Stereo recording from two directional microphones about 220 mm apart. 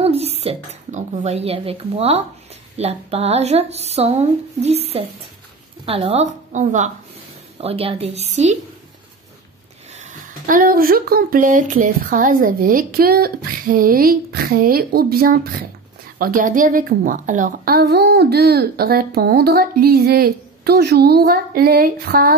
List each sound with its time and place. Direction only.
0.0 s speech: 30° right (ahead or behind)
9.9 s a woman's voice: 35° right (ahead or behind)